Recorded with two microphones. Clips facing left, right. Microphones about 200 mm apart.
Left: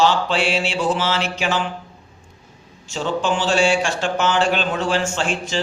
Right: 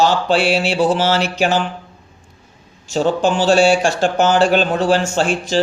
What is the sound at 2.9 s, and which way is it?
Speech, 40° right (ahead or behind).